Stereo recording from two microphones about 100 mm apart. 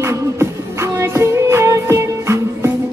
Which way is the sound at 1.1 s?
30° right (ahead or behind).